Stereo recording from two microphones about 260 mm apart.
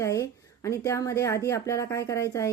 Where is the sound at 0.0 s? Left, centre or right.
Centre.